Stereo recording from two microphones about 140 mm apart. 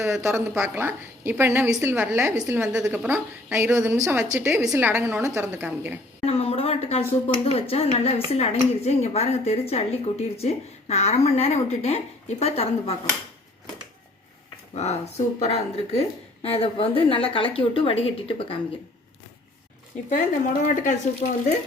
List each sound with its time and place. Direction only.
0.2 s a woman's voice: 15° right (ahead or behind)
2.6 s a woman's voice: 5° right (ahead or behind)
6.2 s a woman's voice: 45° left (ahead or behind)
14.8 s a woman's voice: 50° left (ahead or behind)
20.1 s a woman's voice: 65° left (ahead or behind)